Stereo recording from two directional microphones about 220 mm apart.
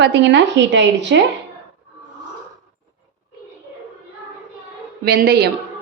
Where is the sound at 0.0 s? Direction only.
55° right (ahead or behind).